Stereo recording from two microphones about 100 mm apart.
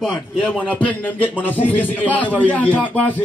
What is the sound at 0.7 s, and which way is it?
A man's voice, 15° left (ahead or behind).